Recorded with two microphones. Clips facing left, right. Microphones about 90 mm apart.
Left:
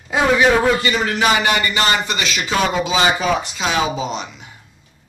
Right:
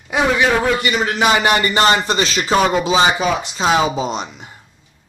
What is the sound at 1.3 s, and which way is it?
A man's voice, 35° right (ahead or behind).